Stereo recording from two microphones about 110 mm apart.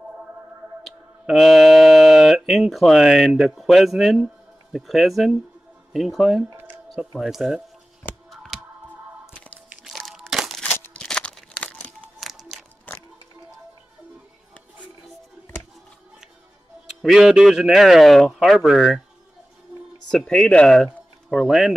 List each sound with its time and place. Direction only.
0.8 s a man's voice: 5° right (ahead or behind)
6.5 s a sound: 15° right (ahead or behind)
7.2 s a man's voice: 5° right (ahead or behind)
8.3 s a sound: centre (ahead or behind)
9.7 s crunch: centre (ahead or behind)
10.6 s crumpling: 10° left (ahead or behind)
12.2 s music: centre (ahead or behind)
12.9 s music: 15° left (ahead or behind)
17.0 s a man's voice: 5° right (ahead or behind)
20.1 s speech: 5° left (ahead or behind)